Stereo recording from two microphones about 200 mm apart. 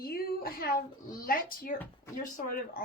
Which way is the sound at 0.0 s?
50° left (ahead or behind).